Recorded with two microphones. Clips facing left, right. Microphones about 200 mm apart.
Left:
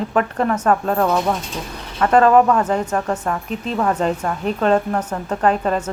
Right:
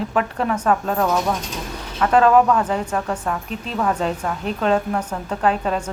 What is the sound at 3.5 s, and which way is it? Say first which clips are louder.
Speech: left 4 dB; 40° left (ahead or behind).